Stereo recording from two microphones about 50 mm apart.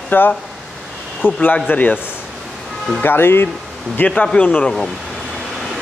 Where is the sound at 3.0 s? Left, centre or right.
Left.